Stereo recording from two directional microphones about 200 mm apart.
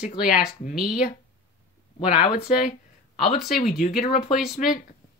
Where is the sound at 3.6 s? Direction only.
40° left (ahead or behind).